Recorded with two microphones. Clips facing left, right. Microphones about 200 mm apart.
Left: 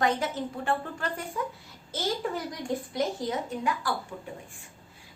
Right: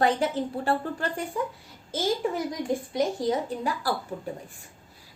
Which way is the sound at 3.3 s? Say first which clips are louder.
Right 3 dB; 35° right (ahead or behind).